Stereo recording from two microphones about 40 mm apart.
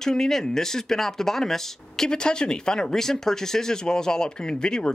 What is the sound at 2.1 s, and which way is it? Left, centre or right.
Speech, left.